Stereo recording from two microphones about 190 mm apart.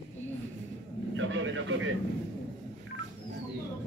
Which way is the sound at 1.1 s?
90° right.